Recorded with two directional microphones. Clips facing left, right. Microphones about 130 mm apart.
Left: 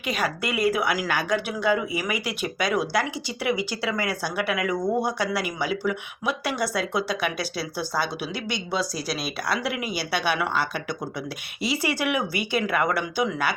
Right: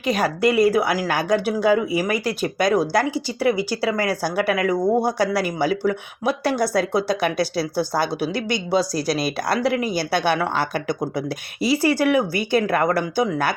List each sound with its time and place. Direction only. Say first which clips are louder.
0.1 s speech: right 8 dB; 40° right (ahead or behind)